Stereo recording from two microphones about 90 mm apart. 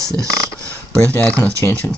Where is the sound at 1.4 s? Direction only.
15° left (ahead or behind).